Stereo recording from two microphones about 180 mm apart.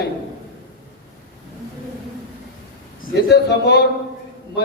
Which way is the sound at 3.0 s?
65° left (ahead or behind).